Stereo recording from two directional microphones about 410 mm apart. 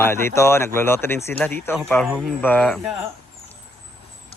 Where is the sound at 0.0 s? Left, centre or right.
Centre.